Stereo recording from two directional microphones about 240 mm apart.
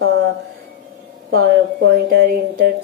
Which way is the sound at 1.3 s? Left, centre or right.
Right.